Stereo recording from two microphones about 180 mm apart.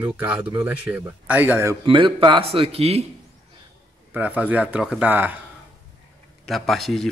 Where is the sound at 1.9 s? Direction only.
30° right (ahead or behind).